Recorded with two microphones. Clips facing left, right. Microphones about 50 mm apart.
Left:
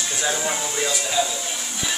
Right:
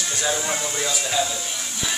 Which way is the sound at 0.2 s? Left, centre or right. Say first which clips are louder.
Even; centre.